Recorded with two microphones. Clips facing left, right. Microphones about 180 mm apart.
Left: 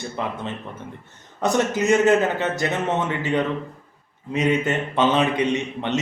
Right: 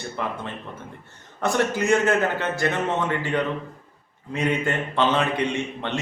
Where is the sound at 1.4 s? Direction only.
20° left (ahead or behind).